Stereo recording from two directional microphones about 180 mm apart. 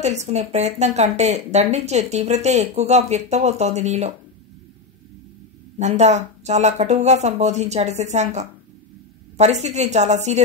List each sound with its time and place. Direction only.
0.0 s speech: 40° right (ahead or behind)
5.8 s speech: 40° right (ahead or behind)